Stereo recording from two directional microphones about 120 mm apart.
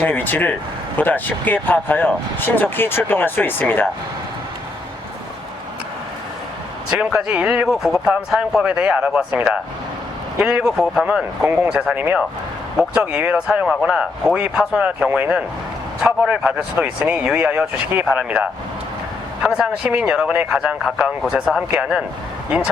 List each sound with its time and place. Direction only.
0.0 s speech: 15° left (ahead or behind)
6.9 s speech: 5° right (ahead or behind)